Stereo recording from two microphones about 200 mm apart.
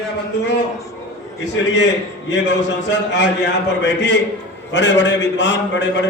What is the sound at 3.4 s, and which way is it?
A man's voice, 60° left (ahead or behind).